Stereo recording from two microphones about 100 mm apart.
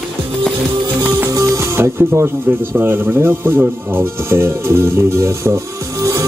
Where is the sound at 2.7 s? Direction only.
20° right (ahead or behind).